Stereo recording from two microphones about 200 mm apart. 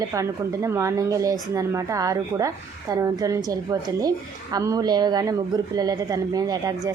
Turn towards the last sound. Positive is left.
turn(degrees=-20)  # may be behind; listen again after turning